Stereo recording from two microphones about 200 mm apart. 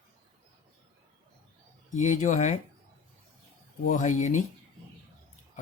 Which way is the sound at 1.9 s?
40° left (ahead or behind).